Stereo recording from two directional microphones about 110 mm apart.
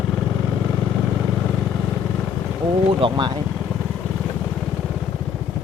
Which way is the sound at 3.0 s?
45° right (ahead or behind).